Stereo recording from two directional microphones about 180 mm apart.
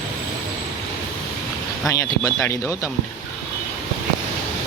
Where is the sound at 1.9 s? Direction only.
15° left (ahead or behind).